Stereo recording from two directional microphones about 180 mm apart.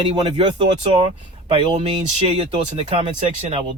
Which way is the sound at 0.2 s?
25° right (ahead or behind).